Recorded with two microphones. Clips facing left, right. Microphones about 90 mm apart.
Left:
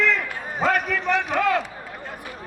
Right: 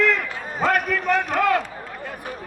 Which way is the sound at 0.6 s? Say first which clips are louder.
Right 1 dB; centre (ahead or behind).